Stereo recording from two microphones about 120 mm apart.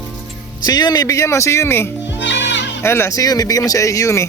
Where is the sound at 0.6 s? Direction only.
35° left (ahead or behind).